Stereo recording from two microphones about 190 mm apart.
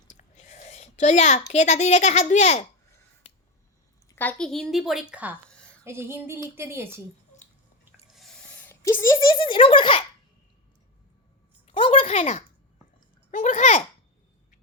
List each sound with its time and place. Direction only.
0.2 s a child's voice: 40° left (ahead or behind)
4.1 s a woman's voice: 10° left (ahead or behind); by 5.4 s 5° right (ahead or behind)
5.8 s a sound: 15° right (ahead or behind)
8.1 s snort: centre (ahead or behind)
8.6 s speech: 15° left (ahead or behind)
9.4 s speech: 25° left (ahead or behind)
11.6 s a child's voice: 30° left (ahead or behind)